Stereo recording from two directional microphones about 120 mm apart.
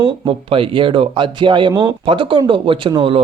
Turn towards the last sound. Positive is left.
turn(degrees=-45)  # may be behind; listen again after turning